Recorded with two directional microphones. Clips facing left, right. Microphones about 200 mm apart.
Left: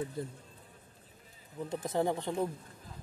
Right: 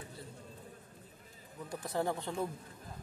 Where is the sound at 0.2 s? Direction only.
50° left (ahead or behind).